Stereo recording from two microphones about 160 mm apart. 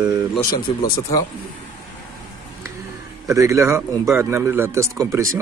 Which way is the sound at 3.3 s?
20° right (ahead or behind).